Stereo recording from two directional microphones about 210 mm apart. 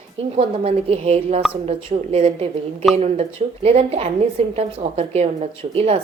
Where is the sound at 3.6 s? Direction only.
30° right (ahead or behind).